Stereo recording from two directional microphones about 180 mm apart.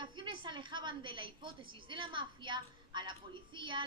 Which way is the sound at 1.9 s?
25° right (ahead or behind).